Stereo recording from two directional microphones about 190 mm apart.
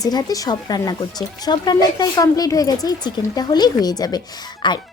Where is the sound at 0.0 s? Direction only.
20° left (ahead or behind).